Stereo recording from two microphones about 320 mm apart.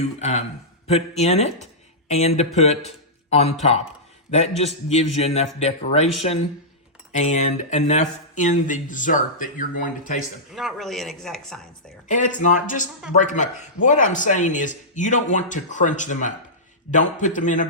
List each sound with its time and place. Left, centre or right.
0.2 s a man's voice: left
7.1 s speech: left
10.5 s speech: centre
12.0 s speech: left